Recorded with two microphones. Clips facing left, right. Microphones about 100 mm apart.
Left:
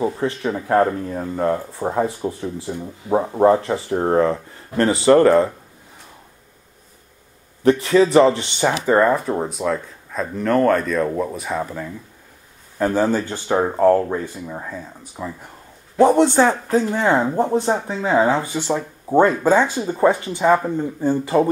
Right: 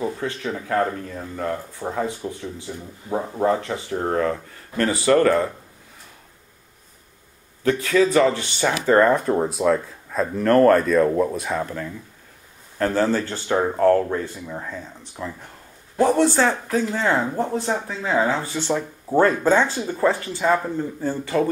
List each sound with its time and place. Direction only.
0.0 s speech: 30° left (ahead or behind)
7.6 s speech: 30° left (ahead or behind)
8.8 s speech: 10° left (ahead or behind)
16.0 s speech: 20° left (ahead or behind)
18.4 s speech: 15° left (ahead or behind)